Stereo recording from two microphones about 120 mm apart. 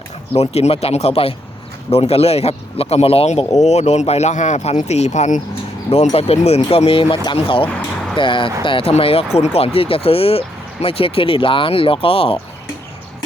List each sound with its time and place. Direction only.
0.3 s speech: 60° left (ahead or behind); by 5.4 s 75° left (ahead or behind)
6.1 s speech: 60° left (ahead or behind)